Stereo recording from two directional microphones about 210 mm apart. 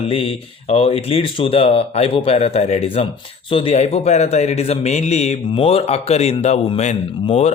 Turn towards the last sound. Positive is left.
turn(degrees=30)  # may be behind; listen again after turning